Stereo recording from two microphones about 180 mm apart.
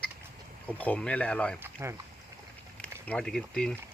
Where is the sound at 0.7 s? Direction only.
10° left (ahead or behind).